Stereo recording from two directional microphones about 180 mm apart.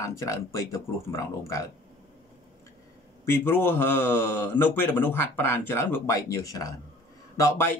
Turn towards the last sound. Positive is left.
turn(degrees=10)  # may be behind; listen again after turning